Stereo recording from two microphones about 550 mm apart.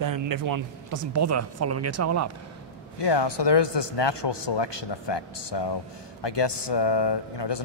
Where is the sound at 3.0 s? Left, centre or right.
Left.